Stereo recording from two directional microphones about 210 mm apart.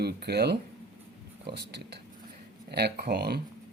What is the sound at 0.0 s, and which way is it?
Speech, 50° right (ahead or behind).